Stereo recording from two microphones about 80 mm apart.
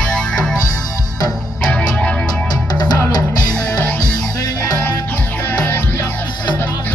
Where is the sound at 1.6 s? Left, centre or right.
Centre.